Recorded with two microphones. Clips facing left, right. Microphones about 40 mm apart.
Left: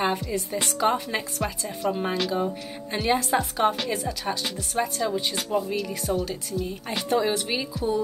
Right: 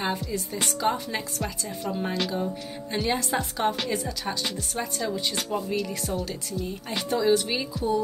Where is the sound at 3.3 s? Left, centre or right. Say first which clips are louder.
Left 3 dB; centre.